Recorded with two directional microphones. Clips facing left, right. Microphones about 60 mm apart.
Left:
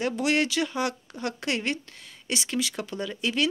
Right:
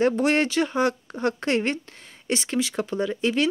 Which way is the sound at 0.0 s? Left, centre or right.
Right.